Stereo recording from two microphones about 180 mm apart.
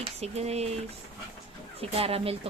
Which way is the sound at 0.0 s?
35° right (ahead or behind).